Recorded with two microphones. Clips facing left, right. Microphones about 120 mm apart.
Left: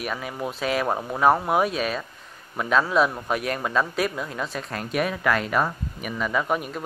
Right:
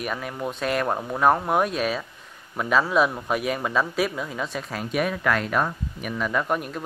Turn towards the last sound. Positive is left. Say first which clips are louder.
# even
turn(degrees=0)  # may be behind; listen again after turning